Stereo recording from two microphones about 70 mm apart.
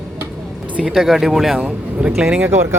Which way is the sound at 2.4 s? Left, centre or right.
Right.